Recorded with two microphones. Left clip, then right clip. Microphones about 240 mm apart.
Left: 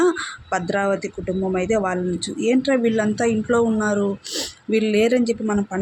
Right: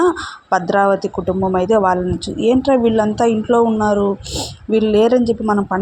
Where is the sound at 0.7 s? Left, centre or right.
Centre.